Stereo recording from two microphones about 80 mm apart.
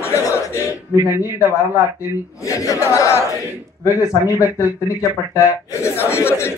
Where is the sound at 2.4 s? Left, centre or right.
Left.